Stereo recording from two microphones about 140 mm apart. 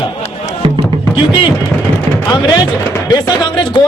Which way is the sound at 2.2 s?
30° left (ahead or behind).